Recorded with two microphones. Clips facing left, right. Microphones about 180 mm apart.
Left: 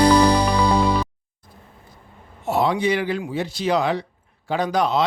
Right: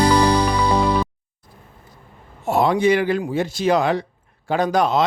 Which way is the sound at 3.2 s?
50° right (ahead or behind).